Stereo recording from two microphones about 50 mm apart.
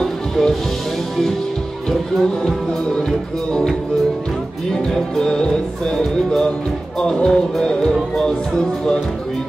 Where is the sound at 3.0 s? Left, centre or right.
Centre.